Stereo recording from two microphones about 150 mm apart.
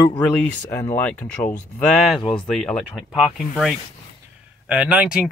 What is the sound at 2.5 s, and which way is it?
Speech, centre (ahead or behind).